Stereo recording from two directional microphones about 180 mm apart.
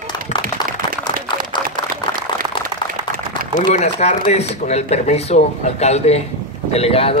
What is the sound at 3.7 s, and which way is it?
A man's voice, 40° left (ahead or behind).